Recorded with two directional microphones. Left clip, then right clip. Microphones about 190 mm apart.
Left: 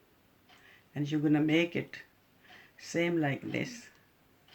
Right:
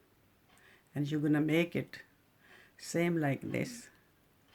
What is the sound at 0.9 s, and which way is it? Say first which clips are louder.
Speech: left 3 dB; 55° right (ahead or behind).